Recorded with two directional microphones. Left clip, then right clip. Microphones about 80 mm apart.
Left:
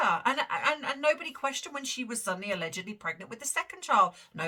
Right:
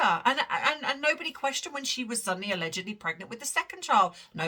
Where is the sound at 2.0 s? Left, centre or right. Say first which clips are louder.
Right 2 dB; right.